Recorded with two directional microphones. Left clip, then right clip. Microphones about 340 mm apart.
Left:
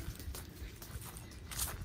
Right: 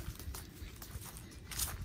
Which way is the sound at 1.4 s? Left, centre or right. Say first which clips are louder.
Right 1 dB; centre.